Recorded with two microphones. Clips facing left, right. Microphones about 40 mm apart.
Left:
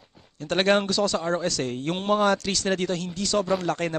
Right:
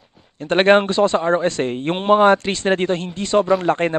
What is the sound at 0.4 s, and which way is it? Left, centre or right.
Speech, right.